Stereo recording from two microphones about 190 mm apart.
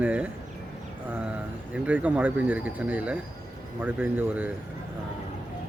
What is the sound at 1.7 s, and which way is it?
Speech, 10° right (ahead or behind).